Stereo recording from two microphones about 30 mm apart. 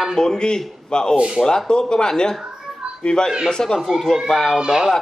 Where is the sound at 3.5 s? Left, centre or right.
Left.